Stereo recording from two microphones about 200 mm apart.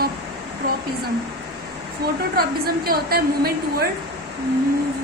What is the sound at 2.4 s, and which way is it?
A woman's voice, 50° right (ahead or behind).